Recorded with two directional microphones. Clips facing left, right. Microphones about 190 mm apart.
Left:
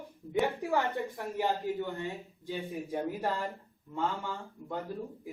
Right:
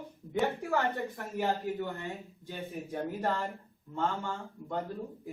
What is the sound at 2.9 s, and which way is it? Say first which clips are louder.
A man's voice: even; 10° left (ahead or behind).